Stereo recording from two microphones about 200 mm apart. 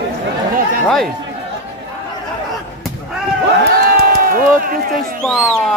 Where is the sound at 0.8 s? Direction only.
Centre (ahead or behind).